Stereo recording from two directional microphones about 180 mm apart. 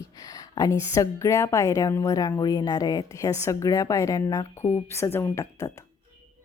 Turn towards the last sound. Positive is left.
turn(degrees=15)  # may be behind; listen again after turning